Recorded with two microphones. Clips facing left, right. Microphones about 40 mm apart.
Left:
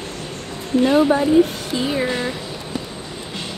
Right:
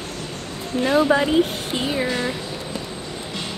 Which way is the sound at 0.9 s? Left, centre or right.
Right.